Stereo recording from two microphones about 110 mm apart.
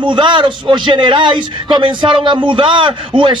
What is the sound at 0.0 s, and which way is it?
A man's voice, 45° right (ahead or behind).